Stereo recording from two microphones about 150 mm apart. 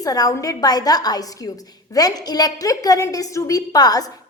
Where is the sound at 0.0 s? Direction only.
25° left (ahead or behind).